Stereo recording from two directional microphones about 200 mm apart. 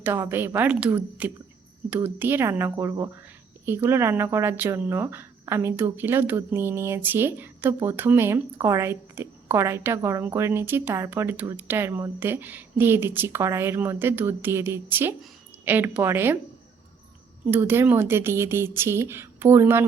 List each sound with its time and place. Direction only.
0.0 s speech: 10° right (ahead or behind)
17.5 s speech: 10° right (ahead or behind)